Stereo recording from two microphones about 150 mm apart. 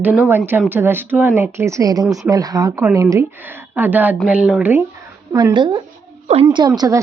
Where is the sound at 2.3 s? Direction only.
25° right (ahead or behind); by 4.8 s 10° right (ahead or behind).